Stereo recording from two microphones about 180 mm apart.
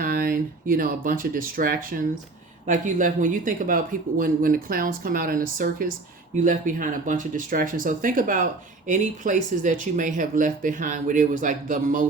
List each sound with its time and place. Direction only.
0.0 s speech: 50° right (ahead or behind)